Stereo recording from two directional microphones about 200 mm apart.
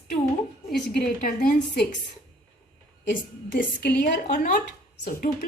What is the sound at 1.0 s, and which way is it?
Speech, 50° left (ahead or behind).